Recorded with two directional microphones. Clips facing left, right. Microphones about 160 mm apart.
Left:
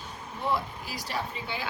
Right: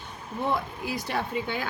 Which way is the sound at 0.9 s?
55° right (ahead or behind).